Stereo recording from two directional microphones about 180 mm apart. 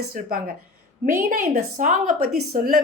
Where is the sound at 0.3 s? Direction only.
55° right (ahead or behind).